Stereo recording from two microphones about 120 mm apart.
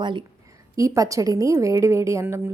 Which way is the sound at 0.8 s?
25° right (ahead or behind).